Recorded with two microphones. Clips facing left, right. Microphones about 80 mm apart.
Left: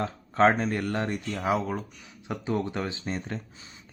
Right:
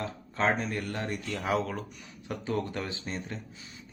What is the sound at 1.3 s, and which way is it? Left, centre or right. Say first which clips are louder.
Speech: left 2 dB; centre.